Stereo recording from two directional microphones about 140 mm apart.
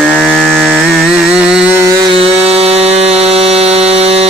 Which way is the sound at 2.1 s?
45° right (ahead or behind).